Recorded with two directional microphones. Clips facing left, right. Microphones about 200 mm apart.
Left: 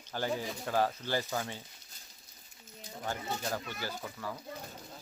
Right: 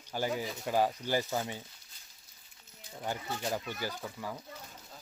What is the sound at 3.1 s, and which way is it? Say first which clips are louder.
Speech: right 1 dB; 15° right (ahead or behind).